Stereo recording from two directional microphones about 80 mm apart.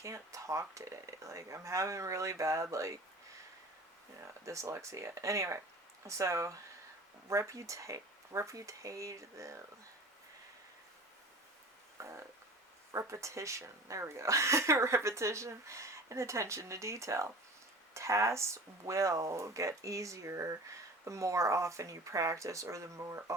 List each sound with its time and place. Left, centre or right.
0.0 s speech: right
4.4 s speech: right
11.9 s a sound: right
12.9 s speech: right